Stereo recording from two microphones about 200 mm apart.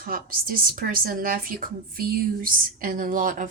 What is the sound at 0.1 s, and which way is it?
A woman's voice, 45° right (ahead or behind).